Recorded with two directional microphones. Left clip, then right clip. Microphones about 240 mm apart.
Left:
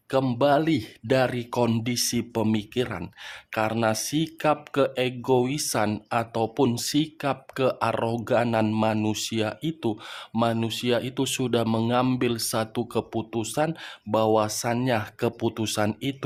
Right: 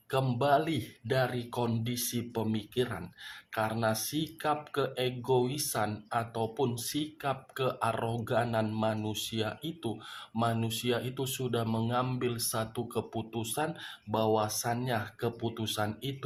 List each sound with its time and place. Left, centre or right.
0.1 s speech: left